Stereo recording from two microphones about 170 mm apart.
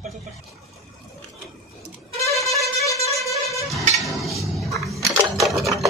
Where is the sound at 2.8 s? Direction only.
20° left (ahead or behind).